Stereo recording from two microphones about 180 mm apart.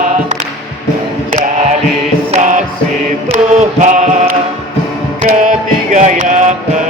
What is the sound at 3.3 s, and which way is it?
Chant, 40° right (ahead or behind).